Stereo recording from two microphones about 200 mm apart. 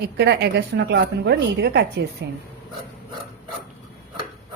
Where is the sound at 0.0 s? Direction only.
55° right (ahead or behind).